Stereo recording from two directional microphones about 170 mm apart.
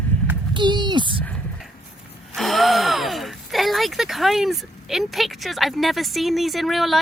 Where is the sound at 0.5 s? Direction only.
25° right (ahead or behind).